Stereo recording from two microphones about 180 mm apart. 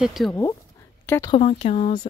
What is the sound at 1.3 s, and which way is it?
Speech, 35° left (ahead or behind).